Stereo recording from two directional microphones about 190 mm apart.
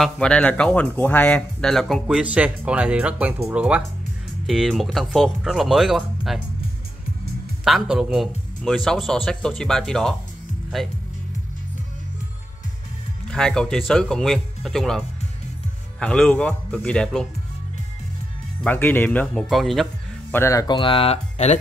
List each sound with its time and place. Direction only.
0.0 s speech: 5° left (ahead or behind)
7.6 s speech: centre (ahead or behind)
13.3 s speech: 5° left (ahead or behind)
18.6 s speech: 10° left (ahead or behind)
20.3 s speech: 15° left (ahead or behind); by 21.5 s 35° left (ahead or behind)